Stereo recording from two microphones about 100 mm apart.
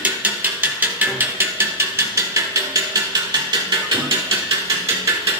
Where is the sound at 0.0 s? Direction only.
15° right (ahead or behind).